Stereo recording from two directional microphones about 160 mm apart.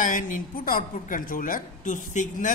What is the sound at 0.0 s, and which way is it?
A woman's voice, 55° left (ahead or behind).